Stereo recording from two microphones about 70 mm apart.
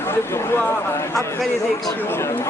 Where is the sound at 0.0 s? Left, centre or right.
Left.